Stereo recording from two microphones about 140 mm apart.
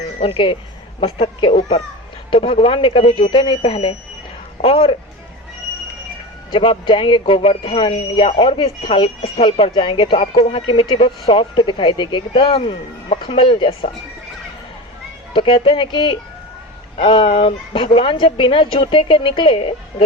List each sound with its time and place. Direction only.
0.2 s speech: 40° left (ahead or behind)
6.5 s speech: 40° left (ahead or behind)
15.3 s speech: 40° left (ahead or behind)